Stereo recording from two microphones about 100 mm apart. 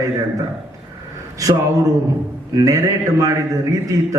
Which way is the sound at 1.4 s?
35° right (ahead or behind).